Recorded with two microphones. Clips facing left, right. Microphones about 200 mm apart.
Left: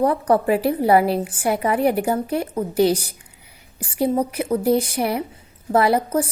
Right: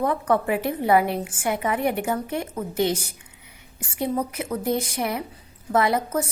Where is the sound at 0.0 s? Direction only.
35° left (ahead or behind).